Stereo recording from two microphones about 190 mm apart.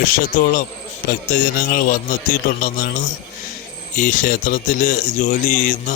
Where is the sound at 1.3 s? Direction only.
45° left (ahead or behind).